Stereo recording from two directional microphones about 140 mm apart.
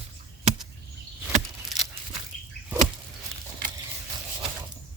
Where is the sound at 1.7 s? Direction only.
Centre (ahead or behind).